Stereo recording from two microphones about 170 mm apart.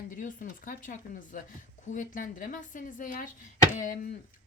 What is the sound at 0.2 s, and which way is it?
Speech, 50° left (ahead or behind).